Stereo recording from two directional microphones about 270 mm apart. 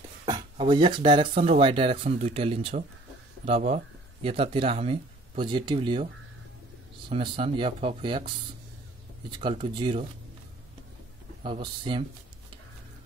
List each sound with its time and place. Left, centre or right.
0.2 s speech: centre
7.1 s speech: centre
9.3 s speech: centre
11.4 s speech: centre